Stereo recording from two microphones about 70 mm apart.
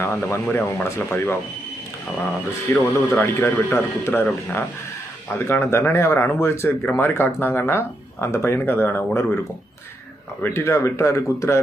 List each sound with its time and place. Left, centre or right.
0.0 s speech: left
2.7 s speech: left
10.4 s speech: left